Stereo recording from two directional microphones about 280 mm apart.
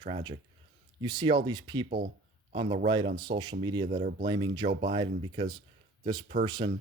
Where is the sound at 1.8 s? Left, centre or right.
Right.